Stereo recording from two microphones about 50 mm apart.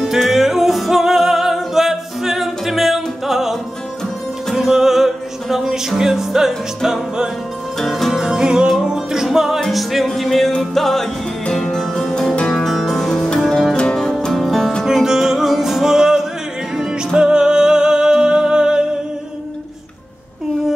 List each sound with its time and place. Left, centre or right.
0.0 s music: centre
4.6 s music: centre
12.4 s music: centre
12.6 s music: centre
14.3 s music: centre
14.9 s music: centre